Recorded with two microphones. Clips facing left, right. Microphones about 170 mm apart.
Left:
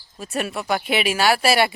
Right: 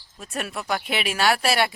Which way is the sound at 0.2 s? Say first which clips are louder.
Left 5 dB; 5° left (ahead or behind).